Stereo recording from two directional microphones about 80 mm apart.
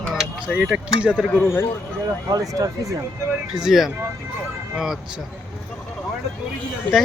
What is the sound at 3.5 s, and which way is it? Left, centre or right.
Speech, centre.